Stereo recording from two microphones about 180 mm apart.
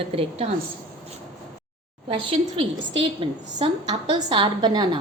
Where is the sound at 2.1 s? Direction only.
30° right (ahead or behind).